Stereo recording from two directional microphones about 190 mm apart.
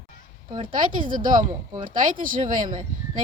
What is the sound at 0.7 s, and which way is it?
Speech, 45° right (ahead or behind).